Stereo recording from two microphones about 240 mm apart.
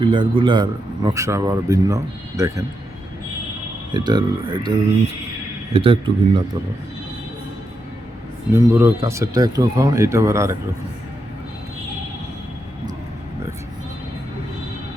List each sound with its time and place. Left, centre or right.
0.0 s a man's voice: centre
3.9 s speech: centre
5.7 s speech: right
8.5 s a man's voice: centre